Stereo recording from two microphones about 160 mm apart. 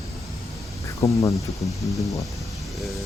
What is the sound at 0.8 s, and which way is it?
Speech, 20° left (ahead or behind).